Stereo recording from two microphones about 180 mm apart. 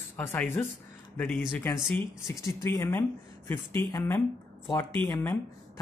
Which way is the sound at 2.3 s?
15° left (ahead or behind).